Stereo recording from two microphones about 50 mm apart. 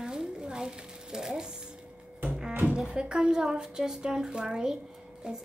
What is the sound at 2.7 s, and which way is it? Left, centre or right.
Speech, centre.